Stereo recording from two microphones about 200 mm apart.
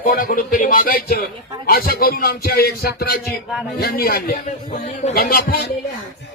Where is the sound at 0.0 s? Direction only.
45° left (ahead or behind).